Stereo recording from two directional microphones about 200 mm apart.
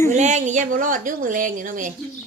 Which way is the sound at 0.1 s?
35° right (ahead or behind).